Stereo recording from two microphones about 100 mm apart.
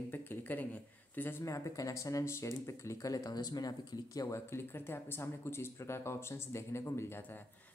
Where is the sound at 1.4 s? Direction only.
30° left (ahead or behind).